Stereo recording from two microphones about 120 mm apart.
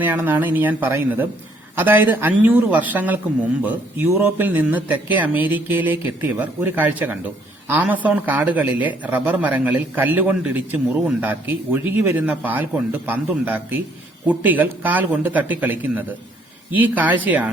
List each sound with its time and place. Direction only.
0.0 s a man's voice: 15° right (ahead or behind)